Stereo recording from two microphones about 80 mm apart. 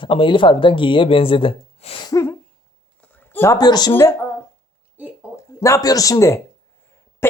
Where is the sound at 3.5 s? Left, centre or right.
Left.